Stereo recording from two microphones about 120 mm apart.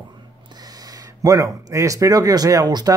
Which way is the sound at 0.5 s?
35° right (ahead or behind).